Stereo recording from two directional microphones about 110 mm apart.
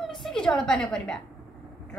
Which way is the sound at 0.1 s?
5° left (ahead or behind).